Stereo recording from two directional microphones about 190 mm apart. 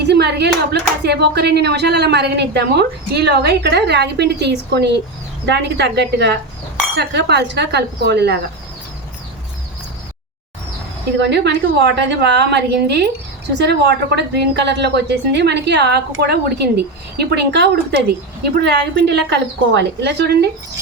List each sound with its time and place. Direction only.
0.0 s speech: 60° right (ahead or behind)
11.2 s speech: 65° right (ahead or behind)